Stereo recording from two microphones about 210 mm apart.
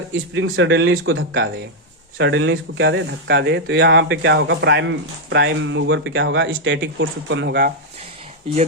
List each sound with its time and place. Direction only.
0.3 s speech: 65° right (ahead or behind)